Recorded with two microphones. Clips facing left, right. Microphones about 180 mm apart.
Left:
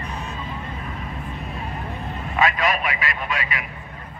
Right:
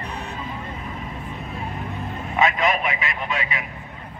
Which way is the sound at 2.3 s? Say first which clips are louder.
Right 1 dB; 25° right (ahead or behind).